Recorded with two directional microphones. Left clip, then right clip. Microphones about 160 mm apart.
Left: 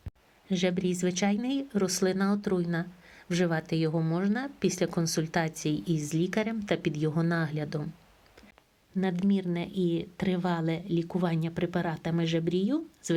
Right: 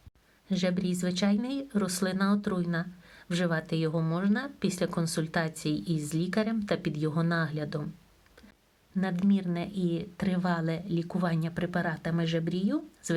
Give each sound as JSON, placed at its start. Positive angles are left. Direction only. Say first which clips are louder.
{"t": 0.4, "sound": "a woman's voice", "louder": "left 2 dB", "side_deg": 30}
{"t": 9.0, "sound": "a woman's voice", "louder": "left 1 dB", "side_deg": 25}